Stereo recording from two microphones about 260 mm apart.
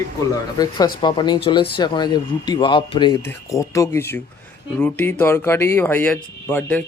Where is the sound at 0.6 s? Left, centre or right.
Centre.